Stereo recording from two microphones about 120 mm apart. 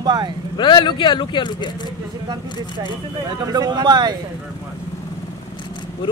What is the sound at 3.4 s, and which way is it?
Speech, 35° right (ahead or behind).